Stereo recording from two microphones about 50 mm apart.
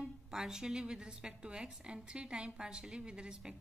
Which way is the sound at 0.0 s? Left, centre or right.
Centre.